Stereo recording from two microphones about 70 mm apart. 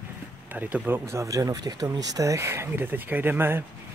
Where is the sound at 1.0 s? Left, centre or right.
Right.